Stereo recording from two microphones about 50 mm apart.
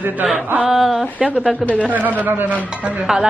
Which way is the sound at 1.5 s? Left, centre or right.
Left.